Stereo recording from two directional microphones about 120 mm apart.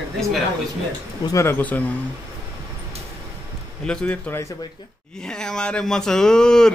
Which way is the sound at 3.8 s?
5° left (ahead or behind).